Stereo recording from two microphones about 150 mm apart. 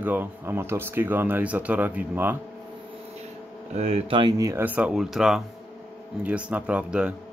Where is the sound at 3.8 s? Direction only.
40° right (ahead or behind).